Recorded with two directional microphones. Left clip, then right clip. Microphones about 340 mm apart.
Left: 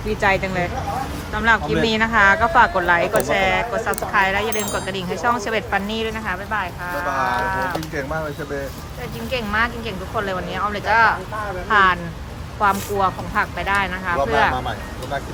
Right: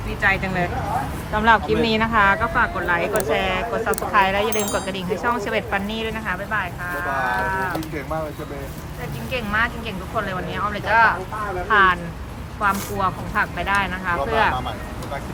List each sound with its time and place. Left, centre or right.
0.2 s speech: centre
7.5 s a sound: centre
9.3 s speech: centre